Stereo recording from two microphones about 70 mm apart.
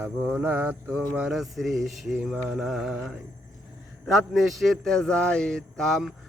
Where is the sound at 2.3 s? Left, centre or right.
Centre.